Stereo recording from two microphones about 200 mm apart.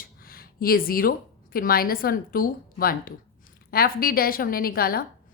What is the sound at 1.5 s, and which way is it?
A woman's voice, 50° left (ahead or behind).